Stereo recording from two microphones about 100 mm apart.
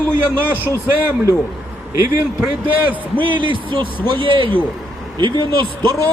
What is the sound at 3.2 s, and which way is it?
Speech, 55° right (ahead or behind).